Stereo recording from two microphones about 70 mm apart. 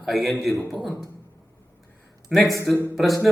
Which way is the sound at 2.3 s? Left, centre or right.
Centre.